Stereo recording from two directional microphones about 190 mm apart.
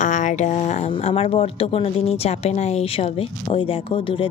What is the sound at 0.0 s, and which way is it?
A woman's voice, 40° left (ahead or behind).